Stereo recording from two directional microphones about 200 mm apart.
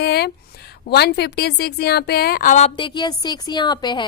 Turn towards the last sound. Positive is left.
turn(degrees=20)  # may be behind; listen again after turning